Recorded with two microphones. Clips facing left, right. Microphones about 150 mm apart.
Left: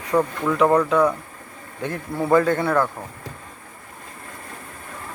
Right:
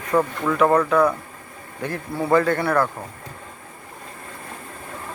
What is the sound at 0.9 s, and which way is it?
Speech, 15° left (ahead or behind).